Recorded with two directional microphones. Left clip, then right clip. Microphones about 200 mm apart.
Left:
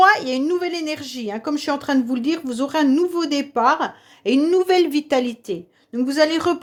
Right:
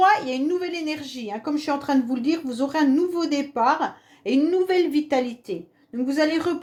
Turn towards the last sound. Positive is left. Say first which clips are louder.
# left 4 dB
turn(degrees=40)  # may be behind; listen again after turning